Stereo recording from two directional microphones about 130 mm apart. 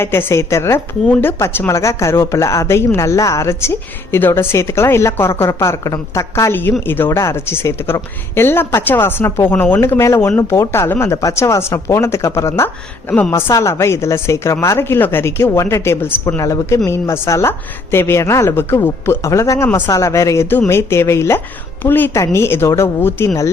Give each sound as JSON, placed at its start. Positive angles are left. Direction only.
{"t": 0.0, "sound": "a woman's voice", "side_deg": 20}